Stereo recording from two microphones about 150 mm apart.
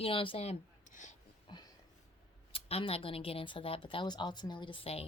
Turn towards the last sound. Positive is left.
turn(degrees=40)  # may be behind; listen again after turning